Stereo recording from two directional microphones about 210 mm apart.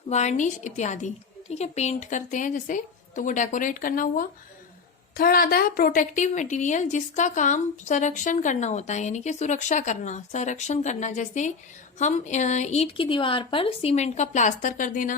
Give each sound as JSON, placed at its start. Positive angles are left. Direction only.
{"t": 0.1, "sound": "a woman's voice", "side_deg": 35}